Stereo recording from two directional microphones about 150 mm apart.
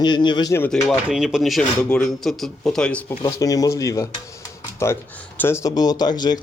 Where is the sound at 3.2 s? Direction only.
25° left (ahead or behind).